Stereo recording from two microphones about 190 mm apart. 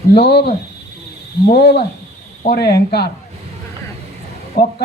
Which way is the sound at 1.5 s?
60° left (ahead or behind).